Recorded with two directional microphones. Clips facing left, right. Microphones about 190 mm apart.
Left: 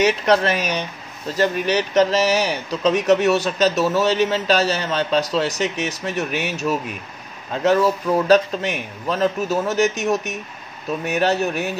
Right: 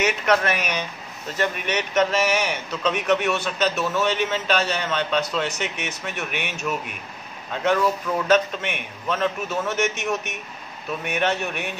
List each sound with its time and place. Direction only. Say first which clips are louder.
0.0 s a man's voice: left 4 dB; 30° left (ahead or behind)
8.3 s a man's voice: left 3 dB; 40° left (ahead or behind)